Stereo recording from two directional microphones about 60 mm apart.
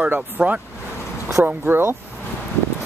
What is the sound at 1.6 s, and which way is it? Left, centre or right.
Speech, right.